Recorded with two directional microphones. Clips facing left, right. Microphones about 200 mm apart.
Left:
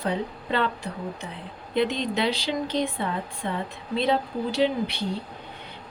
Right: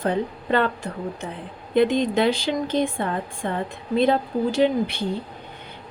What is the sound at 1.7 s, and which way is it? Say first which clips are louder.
A woman's voice: right 6 dB; 50° right (ahead or behind).